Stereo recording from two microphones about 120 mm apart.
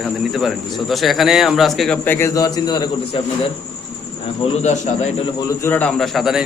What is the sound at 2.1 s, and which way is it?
Speech, 20° left (ahead or behind).